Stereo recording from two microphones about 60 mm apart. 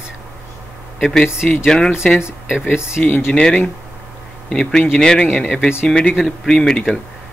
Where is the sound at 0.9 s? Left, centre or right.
Centre.